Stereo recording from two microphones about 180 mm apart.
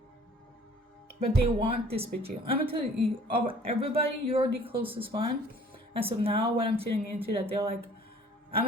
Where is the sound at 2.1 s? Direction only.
60° right (ahead or behind).